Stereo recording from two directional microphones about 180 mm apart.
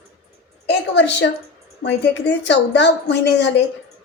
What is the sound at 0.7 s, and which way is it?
Speech, 70° left (ahead or behind).